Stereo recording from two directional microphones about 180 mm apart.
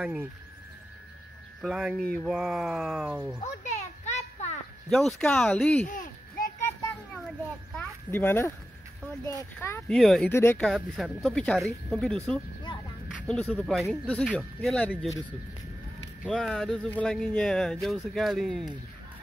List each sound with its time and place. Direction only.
0.0 s speech: 5° right (ahead or behind)
1.6 s speech: centre (ahead or behind)
3.3 s children playing: 40° left (ahead or behind)
4.8 s speech: centre (ahead or behind)
5.9 s a sound: 50° left (ahead or behind)
7.7 s a sound: 10° left (ahead or behind)
9.2 s speech: 15° left (ahead or behind)
9.8 s speech: centre (ahead or behind)
10.7 s speech: centre (ahead or behind)
16.3 s speech: centre (ahead or behind)